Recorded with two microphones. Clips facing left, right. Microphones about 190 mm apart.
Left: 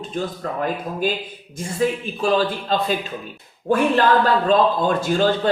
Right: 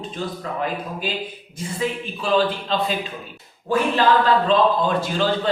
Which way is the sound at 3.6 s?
55° left (ahead or behind).